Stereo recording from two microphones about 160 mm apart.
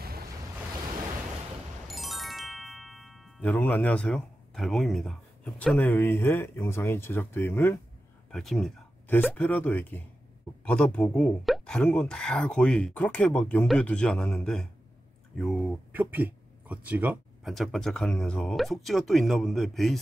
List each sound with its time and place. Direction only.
0.0 s waves: 75° right (ahead or behind)
1.9 s music: centre (ahead or behind)
3.4 s speech: 10° left (ahead or behind)
8.3 s speech: centre (ahead or behind)
15.9 s speech: 10° right (ahead or behind)
17.6 s speech: 5° left (ahead or behind)